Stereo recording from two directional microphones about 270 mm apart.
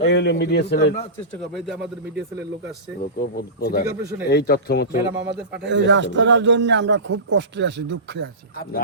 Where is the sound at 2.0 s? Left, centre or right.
Right.